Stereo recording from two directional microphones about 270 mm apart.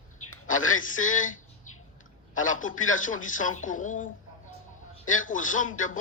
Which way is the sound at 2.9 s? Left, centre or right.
Left.